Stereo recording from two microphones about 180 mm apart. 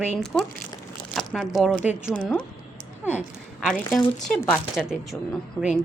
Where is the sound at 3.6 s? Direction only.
5° left (ahead or behind).